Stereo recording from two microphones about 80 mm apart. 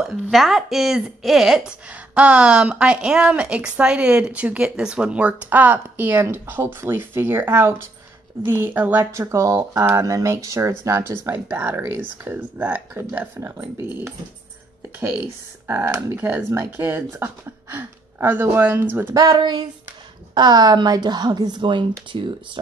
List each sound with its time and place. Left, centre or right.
0.0 s speech: centre
2.1 s a woman's voice: centre
9.1 s speech: right
11.5 s speech: right
15.0 s speech: right
16.8 s speech: right
19.1 s a woman's voice: right